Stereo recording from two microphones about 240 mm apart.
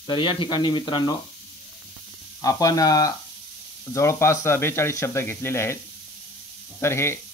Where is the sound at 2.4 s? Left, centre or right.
Centre.